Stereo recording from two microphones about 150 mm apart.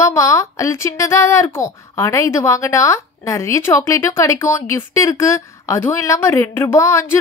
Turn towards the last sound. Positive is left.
turn(degrees=20)  # may be behind; listen again after turning